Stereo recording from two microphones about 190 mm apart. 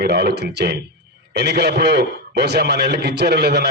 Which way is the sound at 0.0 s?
60° right (ahead or behind).